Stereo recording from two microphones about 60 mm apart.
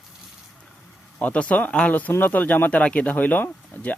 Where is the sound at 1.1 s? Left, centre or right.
Left.